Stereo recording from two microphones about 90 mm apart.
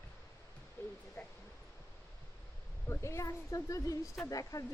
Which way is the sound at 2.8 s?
30° left (ahead or behind).